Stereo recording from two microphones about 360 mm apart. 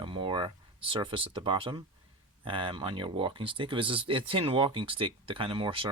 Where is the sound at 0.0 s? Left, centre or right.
Centre.